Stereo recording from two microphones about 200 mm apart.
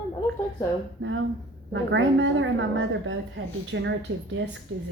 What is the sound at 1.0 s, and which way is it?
Speech, 90° right.